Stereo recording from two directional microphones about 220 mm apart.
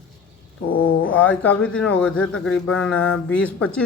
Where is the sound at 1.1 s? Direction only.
5° left (ahead or behind).